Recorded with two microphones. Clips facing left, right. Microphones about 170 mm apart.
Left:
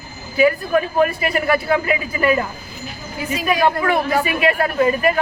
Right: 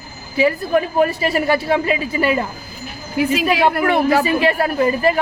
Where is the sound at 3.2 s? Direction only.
80° right.